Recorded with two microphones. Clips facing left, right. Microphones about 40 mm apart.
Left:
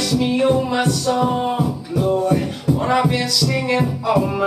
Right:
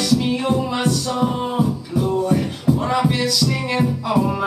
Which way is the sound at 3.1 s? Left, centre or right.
Centre.